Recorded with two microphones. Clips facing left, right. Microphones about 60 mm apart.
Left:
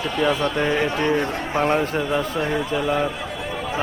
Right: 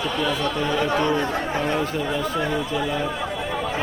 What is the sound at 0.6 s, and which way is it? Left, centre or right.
Speech, left.